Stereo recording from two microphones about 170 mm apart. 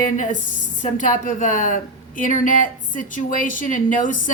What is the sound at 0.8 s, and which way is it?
A woman's voice, 50° left (ahead or behind).